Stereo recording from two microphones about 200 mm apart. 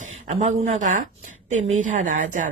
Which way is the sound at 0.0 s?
35° right (ahead or behind).